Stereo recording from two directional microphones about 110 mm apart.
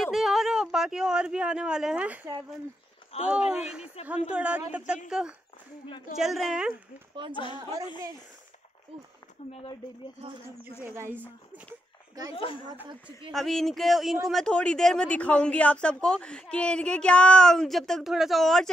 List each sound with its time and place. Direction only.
0.0 s speech: centre (ahead or behind)
3.3 s a woman's voice: 10° right (ahead or behind)
10.8 s speech: 20° right (ahead or behind)
12.4 s speech: 55° left (ahead or behind)
13.3 s speech: 5° left (ahead or behind)